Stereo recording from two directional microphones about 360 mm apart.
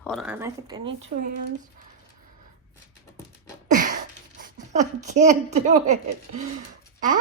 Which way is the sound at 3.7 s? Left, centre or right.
Right.